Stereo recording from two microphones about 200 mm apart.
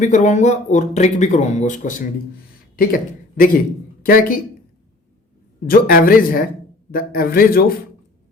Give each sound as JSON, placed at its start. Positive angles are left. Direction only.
{"t": 0.0, "sound": "a man's voice", "side_deg": 35}
{"t": 5.6, "sound": "a man's voice", "side_deg": 45}